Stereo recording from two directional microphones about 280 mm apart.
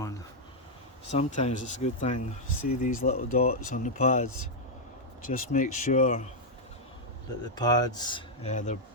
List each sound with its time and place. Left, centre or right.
1.1 s speech: left
7.5 s speech: centre